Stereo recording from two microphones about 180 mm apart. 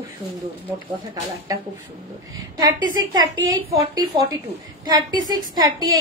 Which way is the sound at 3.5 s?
30° right (ahead or behind).